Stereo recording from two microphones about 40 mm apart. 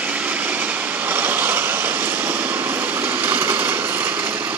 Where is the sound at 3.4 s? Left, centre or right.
Right.